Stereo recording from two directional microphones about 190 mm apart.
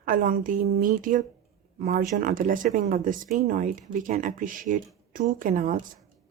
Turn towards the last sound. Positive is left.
turn(degrees=-45)  # may be behind; listen again after turning